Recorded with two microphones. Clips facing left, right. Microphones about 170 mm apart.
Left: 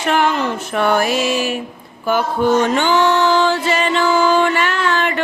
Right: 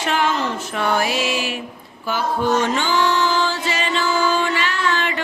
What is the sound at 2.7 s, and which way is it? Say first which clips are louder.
Music: left 5 dB; 60° left (ahead or behind).